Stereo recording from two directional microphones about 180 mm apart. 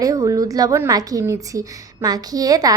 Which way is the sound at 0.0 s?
20° right (ahead or behind).